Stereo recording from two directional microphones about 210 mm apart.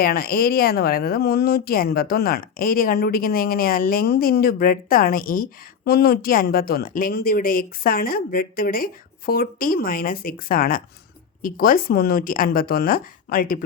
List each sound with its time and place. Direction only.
0.0 s speech: 45° left (ahead or behind)